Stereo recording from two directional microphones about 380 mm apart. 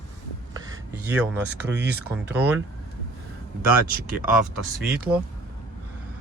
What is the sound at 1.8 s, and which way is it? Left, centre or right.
Speech, right.